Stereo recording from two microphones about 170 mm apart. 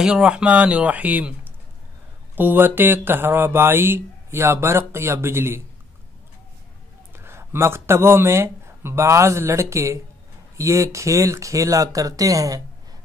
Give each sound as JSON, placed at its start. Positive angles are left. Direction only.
{"t": 0.0, "sound": "speech", "side_deg": -5}
{"t": 2.3, "sound": "speech", "side_deg": -10}
{"t": 7.1, "sound": "speech", "side_deg": -15}